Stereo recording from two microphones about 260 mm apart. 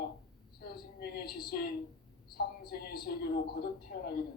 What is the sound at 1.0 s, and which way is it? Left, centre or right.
A man's voice, left.